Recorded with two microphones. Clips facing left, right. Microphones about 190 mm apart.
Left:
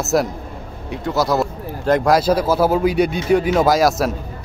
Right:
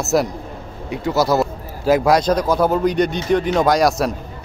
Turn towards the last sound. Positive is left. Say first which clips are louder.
# left 1 dB
turn(degrees=0)  # may be behind; listen again after turning